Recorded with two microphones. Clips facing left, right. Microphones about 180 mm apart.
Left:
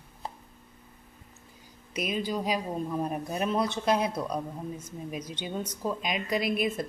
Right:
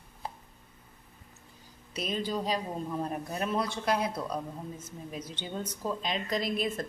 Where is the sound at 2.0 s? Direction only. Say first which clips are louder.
Left 2 dB; 10° left (ahead or behind).